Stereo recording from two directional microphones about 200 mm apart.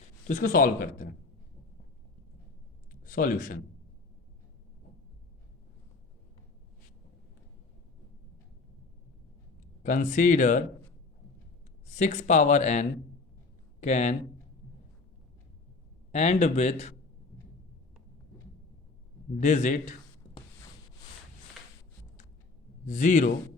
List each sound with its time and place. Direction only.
0.3 s speech: 40° left (ahead or behind)
2.9 s speech: 45° left (ahead or behind)
9.8 s speech: 40° left (ahead or behind)
11.9 s speech: 35° left (ahead or behind)
16.1 s speech: 35° left (ahead or behind)
19.4 s speech: 35° left (ahead or behind)
22.9 s speech: 40° left (ahead or behind)